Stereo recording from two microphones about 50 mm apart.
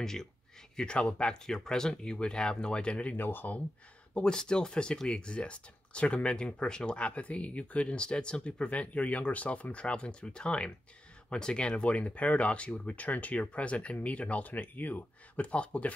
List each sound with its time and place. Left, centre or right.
0.0 s speech: centre
0.7 s speech: left
1.3 s speech: centre
3.2 s speech: left
4.1 s speech: centre